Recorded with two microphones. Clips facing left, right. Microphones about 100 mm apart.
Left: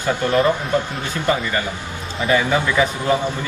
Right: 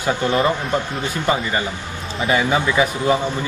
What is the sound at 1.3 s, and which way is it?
A man's voice, 20° right (ahead or behind).